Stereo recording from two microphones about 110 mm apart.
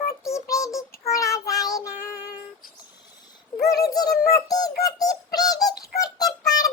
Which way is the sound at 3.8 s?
35° left (ahead or behind).